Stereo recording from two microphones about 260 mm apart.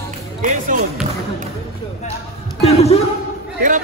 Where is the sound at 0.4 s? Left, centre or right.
Right.